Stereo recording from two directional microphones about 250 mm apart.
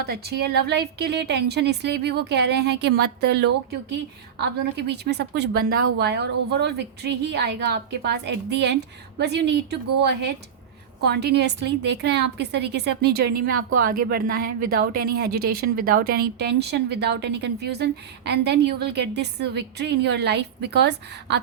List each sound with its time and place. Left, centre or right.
0.0 s a woman's voice: right